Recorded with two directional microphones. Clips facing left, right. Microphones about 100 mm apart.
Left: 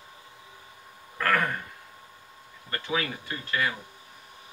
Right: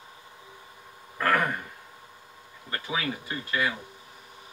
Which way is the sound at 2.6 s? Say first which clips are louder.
Left 2 dB; 20° right (ahead or behind).